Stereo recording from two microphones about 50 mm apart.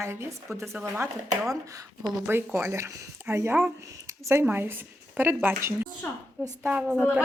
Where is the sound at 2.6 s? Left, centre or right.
Right.